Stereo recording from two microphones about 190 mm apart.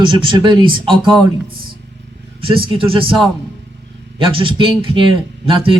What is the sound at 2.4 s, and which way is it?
Speech, 25° right (ahead or behind).